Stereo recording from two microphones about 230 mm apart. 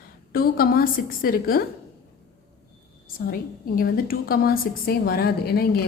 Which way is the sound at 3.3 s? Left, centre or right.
Left.